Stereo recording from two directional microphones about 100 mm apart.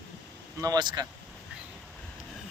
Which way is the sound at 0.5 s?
40° right (ahead or behind).